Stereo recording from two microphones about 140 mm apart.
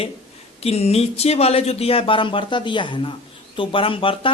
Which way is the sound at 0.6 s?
45° left (ahead or behind).